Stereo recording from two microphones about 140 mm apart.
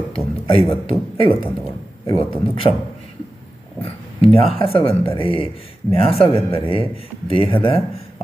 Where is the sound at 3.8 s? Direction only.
40° left (ahead or behind).